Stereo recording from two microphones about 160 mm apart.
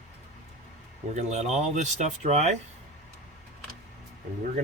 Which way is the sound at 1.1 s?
45° right (ahead or behind).